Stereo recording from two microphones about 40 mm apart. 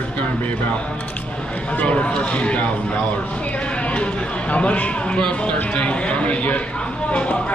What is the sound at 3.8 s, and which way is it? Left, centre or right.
Speech, left.